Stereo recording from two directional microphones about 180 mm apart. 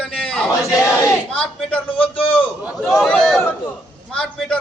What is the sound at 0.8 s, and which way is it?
A man's voice, 15° left (ahead or behind).